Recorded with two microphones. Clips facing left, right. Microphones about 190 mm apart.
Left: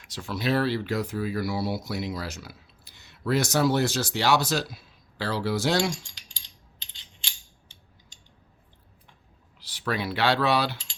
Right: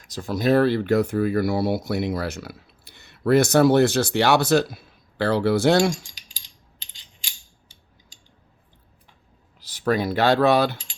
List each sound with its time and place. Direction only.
0.0 s speech: 40° right (ahead or behind)
9.6 s speech: 45° right (ahead or behind)